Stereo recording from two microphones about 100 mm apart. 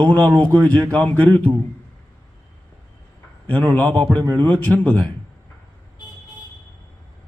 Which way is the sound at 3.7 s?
15° left (ahead or behind).